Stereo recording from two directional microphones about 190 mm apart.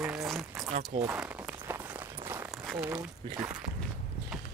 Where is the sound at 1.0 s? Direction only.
5° right (ahead or behind).